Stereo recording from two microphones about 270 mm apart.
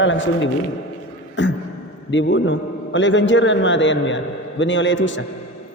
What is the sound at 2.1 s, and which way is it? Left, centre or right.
A man's voice, left.